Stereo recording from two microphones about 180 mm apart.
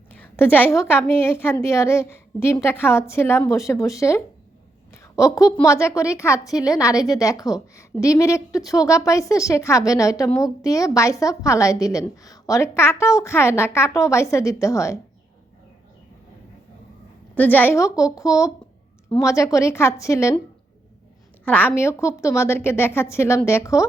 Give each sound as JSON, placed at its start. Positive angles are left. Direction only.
{"t": 0.2, "sound": "a woman's voice", "side_deg": 10}
{"t": 17.3, "sound": "a woman's voice", "side_deg": 10}
{"t": 21.4, "sound": "a woman's voice", "side_deg": 10}